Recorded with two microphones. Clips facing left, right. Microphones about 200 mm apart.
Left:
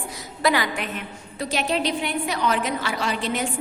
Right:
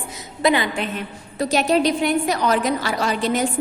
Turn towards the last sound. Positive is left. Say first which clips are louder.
# right 5 dB
turn(degrees=-40)  # may be behind; listen again after turning